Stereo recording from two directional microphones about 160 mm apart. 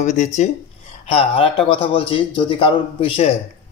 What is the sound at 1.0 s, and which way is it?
A man's voice, 35° left (ahead or behind).